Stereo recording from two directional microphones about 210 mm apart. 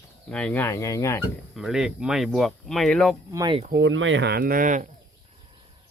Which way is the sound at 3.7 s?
55° right (ahead or behind).